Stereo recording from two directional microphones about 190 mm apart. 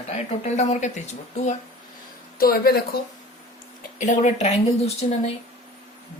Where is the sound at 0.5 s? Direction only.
35° left (ahead or behind).